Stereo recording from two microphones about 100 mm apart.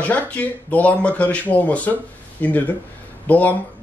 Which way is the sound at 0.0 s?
15° left (ahead or behind).